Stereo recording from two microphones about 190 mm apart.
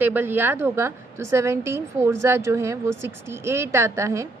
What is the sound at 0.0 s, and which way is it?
A woman's voice, 10° right (ahead or behind).